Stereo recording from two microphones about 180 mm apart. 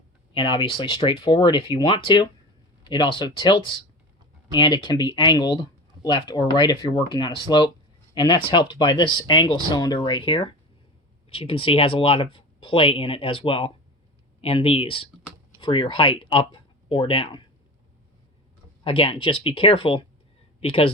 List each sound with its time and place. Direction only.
0.3 s speech: 25° left (ahead or behind)
18.9 s speech: 30° left (ahead or behind)